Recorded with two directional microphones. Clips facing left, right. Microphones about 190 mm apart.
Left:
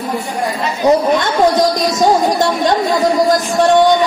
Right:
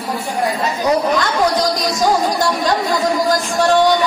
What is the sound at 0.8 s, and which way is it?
Speech, 25° left (ahead or behind).